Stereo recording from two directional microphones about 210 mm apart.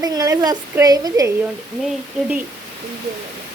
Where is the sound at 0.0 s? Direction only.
15° right (ahead or behind).